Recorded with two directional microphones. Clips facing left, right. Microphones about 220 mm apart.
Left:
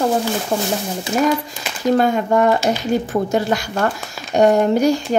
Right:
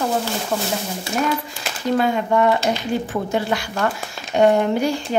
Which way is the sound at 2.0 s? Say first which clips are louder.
Even; 45° left (ahead or behind).